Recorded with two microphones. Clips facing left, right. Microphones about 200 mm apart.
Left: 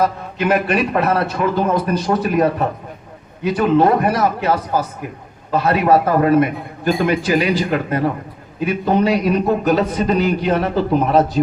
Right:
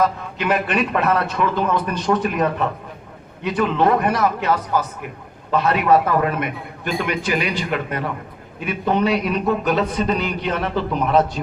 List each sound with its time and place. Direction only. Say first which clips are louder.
0.0 s a man's voice: left 2 dB; 35° left (ahead or behind)